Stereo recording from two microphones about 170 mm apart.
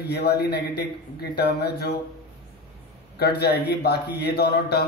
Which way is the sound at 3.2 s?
70° left (ahead or behind).